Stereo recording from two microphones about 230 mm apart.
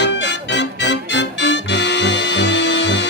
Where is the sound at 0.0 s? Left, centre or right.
Left.